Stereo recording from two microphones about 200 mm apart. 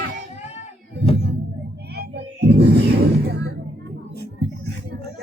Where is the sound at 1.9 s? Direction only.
55° right (ahead or behind).